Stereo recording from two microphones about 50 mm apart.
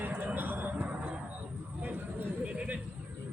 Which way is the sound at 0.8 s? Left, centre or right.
Right.